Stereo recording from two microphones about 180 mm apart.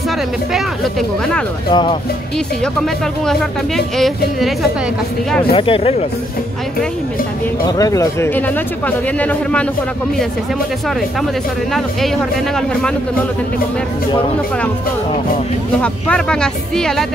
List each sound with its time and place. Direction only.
0.5 s speech: centre (ahead or behind)
1.7 s speech: 25° left (ahead or behind)
2.3 s speech: 5° left (ahead or behind)
5.5 s speech: 30° left (ahead or behind)
7.6 s speech: 20° left (ahead or behind)
11.7 s speech: centre (ahead or behind)
15.8 s speech: 5° left (ahead or behind)